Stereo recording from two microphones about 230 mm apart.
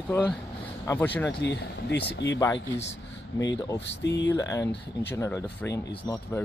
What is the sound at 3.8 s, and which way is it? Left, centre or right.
Speech, left.